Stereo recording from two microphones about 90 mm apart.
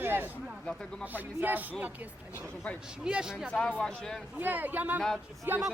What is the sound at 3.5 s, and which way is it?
Speech, 15° left (ahead or behind).